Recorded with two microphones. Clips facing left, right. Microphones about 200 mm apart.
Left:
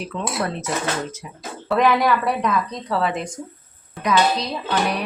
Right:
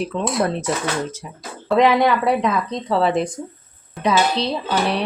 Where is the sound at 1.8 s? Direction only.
20° right (ahead or behind).